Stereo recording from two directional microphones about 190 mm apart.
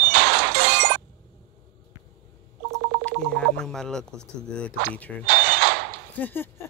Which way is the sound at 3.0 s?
5° left (ahead or behind).